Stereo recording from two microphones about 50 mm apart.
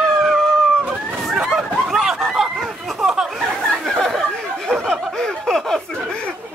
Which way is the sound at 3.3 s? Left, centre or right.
Centre.